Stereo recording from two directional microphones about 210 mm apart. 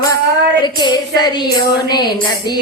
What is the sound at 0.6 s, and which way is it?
Female singing, 20° left (ahead or behind).